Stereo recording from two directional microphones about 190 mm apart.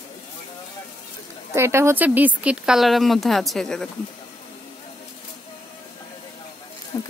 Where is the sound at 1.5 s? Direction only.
15° right (ahead or behind); by 3.8 s centre (ahead or behind).